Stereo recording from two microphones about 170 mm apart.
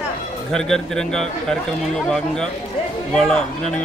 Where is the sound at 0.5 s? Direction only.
5° left (ahead or behind).